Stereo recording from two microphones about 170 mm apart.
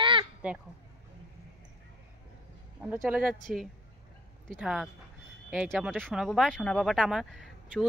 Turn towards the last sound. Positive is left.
turn(degrees=0)  # may be behind; listen again after turning